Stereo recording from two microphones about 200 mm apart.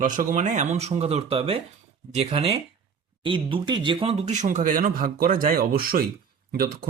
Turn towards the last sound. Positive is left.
turn(degrees=-50)  # may be behind; listen again after turning